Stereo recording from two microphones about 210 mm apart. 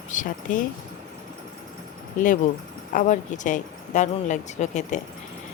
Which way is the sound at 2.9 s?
35° left (ahead or behind).